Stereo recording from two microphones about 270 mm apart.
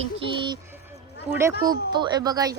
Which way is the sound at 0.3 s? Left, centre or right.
Centre.